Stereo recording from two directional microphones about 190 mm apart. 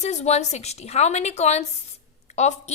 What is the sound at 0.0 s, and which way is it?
A woman's voice, 35° left (ahead or behind).